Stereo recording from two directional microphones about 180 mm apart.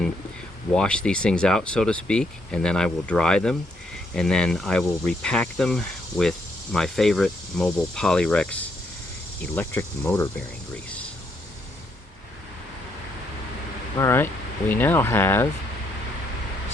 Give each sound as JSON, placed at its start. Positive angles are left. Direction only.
{"t": 0.7, "sound": "speech", "side_deg": 5}
{"t": 9.6, "sound": "speech", "side_deg": 10}
{"t": 14.0, "sound": "speech", "side_deg": 15}